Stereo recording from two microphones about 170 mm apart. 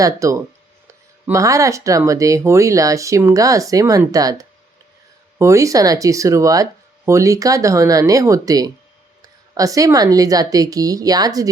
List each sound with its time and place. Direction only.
0.0 s speech: 20° right (ahead or behind)